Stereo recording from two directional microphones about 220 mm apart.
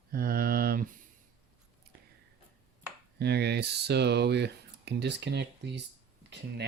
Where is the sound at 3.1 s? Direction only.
50° right (ahead or behind).